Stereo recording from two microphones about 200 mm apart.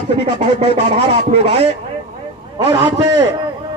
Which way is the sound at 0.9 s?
30° right (ahead or behind).